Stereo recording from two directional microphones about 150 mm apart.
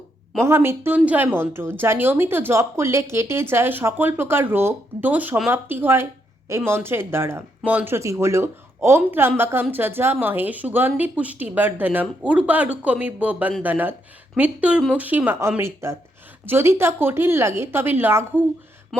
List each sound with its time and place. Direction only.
0.3 s a woman's voice: 15° right (ahead or behind)